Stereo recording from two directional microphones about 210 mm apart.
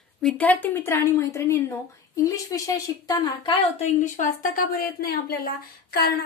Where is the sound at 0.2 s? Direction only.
5° left (ahead or behind).